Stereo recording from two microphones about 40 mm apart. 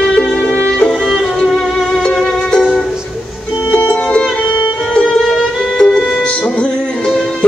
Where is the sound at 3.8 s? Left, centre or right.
Left.